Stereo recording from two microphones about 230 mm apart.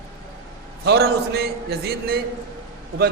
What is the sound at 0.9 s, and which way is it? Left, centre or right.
A man's voice, right.